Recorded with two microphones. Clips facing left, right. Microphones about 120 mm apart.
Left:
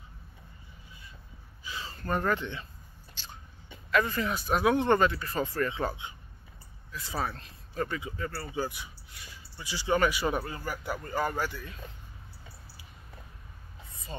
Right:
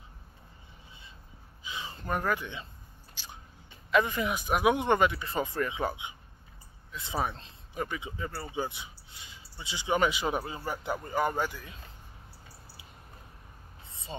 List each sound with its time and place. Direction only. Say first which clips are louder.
1.6 s a sound: even; 20° right (ahead or behind)
2.0 s speech: left 2 dB; 10° right (ahead or behind)
3.2 s biting: even; 10° right (ahead or behind)
3.9 s speech: right 1 dB; 20° right (ahead or behind)